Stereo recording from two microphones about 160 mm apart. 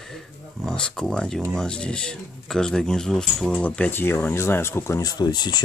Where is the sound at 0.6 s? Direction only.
5° left (ahead or behind).